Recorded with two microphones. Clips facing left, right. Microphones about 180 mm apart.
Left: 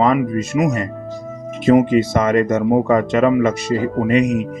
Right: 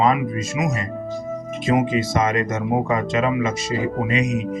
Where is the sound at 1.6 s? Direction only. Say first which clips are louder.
Left 7 dB; 60° left (ahead or behind).